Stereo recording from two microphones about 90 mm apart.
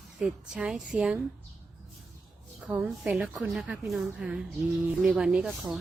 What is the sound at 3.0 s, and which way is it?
Speech, 5° right (ahead or behind).